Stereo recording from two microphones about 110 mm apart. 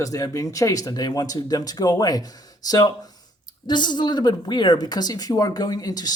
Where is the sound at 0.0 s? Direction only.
30° left (ahead or behind).